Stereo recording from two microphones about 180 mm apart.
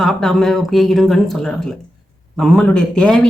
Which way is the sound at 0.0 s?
Centre (ahead or behind).